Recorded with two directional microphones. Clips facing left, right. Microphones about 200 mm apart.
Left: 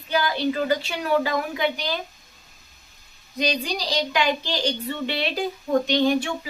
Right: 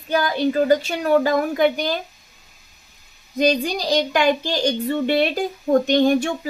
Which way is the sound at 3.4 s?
50° right (ahead or behind).